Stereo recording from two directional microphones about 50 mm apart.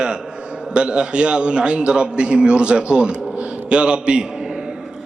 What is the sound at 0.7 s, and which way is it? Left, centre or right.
A man's voice, centre.